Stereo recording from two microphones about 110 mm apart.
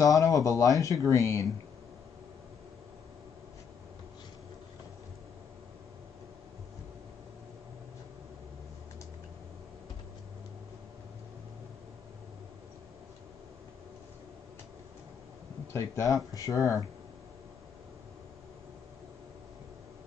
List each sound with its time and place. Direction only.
0.0 s speech: 30° left (ahead or behind)
15.7 s speech: 30° left (ahead or behind)